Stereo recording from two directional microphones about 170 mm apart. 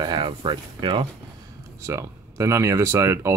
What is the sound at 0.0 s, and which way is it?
Speech, 25° right (ahead or behind).